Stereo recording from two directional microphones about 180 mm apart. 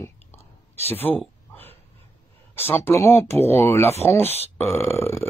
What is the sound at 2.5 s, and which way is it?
Speech, 15° left (ahead or behind).